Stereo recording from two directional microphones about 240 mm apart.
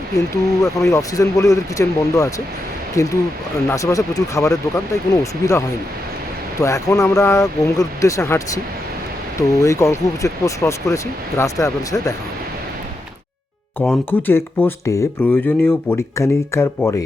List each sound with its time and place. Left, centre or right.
0.6 s speech: centre
13.7 s speech: centre